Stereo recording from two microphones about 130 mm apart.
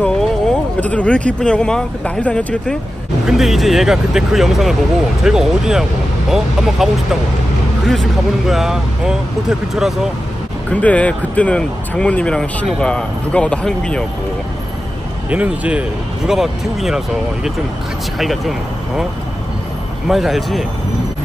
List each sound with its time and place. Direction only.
0.0 s speech: 5° left (ahead or behind)
10.7 s speech: 10° left (ahead or behind)
15.2 s a man's voice: 10° right (ahead or behind)
20.1 s speech: centre (ahead or behind)